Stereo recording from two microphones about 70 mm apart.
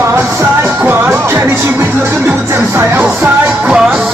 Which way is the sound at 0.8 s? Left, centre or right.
Right.